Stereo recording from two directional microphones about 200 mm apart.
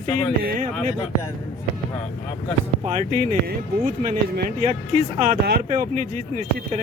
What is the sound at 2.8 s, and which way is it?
Speech, 40° right (ahead or behind).